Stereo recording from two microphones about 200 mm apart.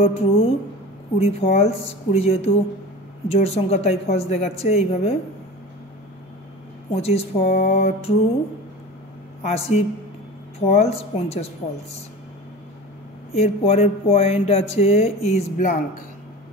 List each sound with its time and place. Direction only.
0.0 s a woman's voice: 30° left (ahead or behind)
6.9 s a woman's voice: 30° left (ahead or behind)
7.3 s mantra: 50° left (ahead or behind)
9.4 s speech: 30° left (ahead or behind)
13.3 s speech: 30° left (ahead or behind)